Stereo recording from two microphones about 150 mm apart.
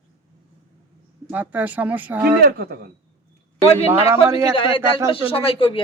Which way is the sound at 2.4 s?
90° right.